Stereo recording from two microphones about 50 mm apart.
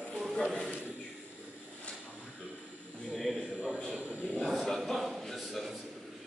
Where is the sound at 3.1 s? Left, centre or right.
Centre.